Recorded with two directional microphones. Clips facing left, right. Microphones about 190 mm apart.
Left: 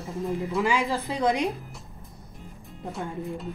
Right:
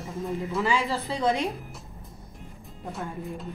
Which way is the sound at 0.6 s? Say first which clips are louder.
Left 1 dB; 15° left (ahead or behind).